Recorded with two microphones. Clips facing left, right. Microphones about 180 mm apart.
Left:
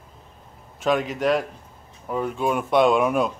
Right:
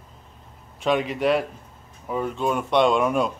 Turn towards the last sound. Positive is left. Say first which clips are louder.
# left 1 dB
turn(degrees=5)  # may be behind; listen again after turning